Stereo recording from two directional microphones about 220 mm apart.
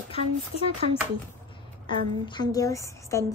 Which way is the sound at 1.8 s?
20° left (ahead or behind).